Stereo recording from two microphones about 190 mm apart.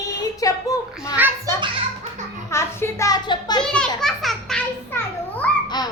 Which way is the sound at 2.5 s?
15° left (ahead or behind).